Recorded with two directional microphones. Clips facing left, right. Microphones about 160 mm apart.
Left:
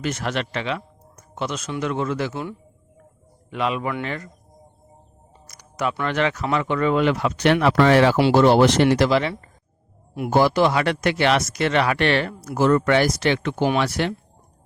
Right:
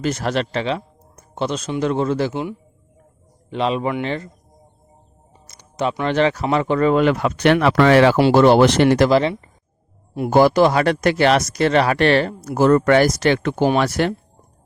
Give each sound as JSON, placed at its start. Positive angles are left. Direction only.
{"t": 0.0, "sound": "speech", "side_deg": -35}
{"t": 3.5, "sound": "a man's voice", "side_deg": -30}
{"t": 5.5, "sound": "a sound", "side_deg": -25}
{"t": 5.9, "sound": "speech", "side_deg": -25}
{"t": 8.1, "sound": "speech", "side_deg": -50}
{"t": 10.2, "sound": "speech", "side_deg": -45}